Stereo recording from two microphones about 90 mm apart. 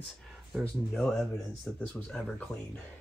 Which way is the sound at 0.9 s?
5° left (ahead or behind).